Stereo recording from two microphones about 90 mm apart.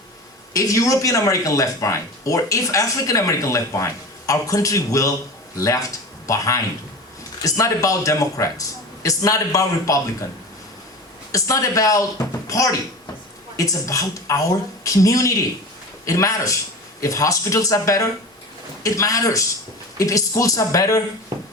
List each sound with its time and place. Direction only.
0.5 s speech: 40° left (ahead or behind)
11.3 s speech: 40° left (ahead or behind)